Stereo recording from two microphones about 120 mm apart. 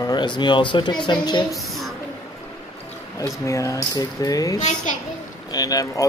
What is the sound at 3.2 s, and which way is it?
Speech, 25° left (ahead or behind).